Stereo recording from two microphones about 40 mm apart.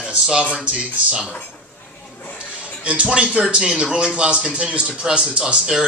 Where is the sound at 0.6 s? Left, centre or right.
Right.